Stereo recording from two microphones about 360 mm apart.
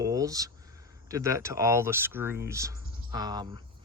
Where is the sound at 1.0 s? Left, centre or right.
Centre.